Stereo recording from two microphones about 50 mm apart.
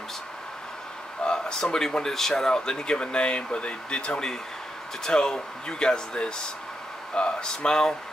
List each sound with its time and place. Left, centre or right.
1.2 s speech: centre